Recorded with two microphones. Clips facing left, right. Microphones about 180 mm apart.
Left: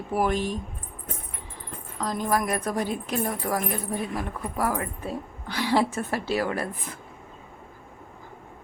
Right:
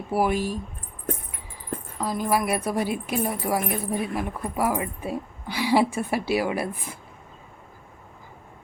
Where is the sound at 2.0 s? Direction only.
10° right (ahead or behind).